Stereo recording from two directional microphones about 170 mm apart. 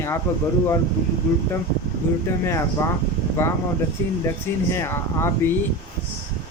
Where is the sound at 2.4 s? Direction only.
15° left (ahead or behind).